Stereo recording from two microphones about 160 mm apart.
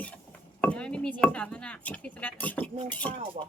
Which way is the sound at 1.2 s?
10° left (ahead or behind).